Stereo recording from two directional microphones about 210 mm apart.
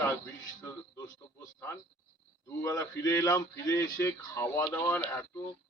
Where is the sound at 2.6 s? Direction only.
15° left (ahead or behind).